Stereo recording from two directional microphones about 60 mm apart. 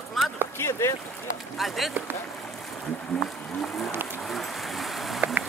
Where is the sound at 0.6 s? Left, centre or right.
Left.